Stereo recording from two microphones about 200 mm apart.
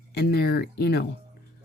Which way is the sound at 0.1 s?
55° left (ahead or behind).